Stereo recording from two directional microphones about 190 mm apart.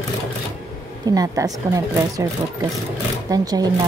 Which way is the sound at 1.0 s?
20° right (ahead or behind).